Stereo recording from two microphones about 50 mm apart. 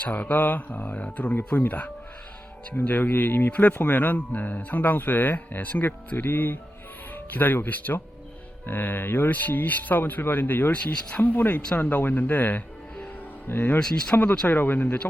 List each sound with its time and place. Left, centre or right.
0.0 s speech: left
5.7 s speech: left
6.1 s speech: left
13.7 s speech: centre
14.4 s speech: left